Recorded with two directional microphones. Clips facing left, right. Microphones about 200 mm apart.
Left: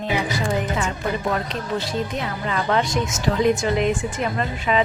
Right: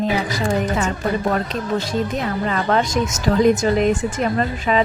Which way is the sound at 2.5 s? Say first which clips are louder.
Right 1 dB; 40° right (ahead or behind).